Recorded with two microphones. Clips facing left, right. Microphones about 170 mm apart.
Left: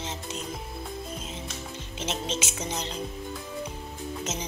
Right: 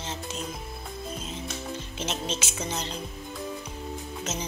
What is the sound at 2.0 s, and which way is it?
Speech, 20° left (ahead or behind).